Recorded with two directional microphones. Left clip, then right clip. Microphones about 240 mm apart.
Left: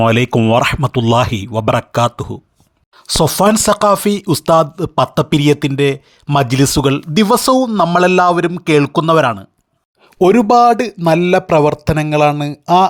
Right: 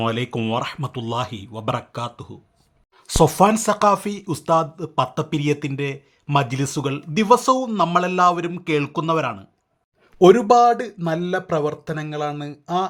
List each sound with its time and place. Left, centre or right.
0.0 s speech: left
3.2 s speech: centre